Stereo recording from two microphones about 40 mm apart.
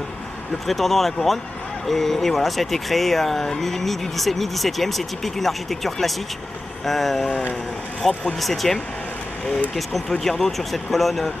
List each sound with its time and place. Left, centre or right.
0.7 s speech: centre
8.1 s speech: left
8.4 s speech: centre
9.8 s speech: centre